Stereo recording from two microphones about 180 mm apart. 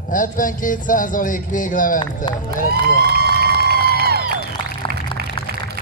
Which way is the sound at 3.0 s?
60° right (ahead or behind).